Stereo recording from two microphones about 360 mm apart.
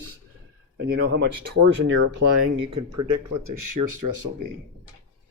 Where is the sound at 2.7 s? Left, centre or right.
Right.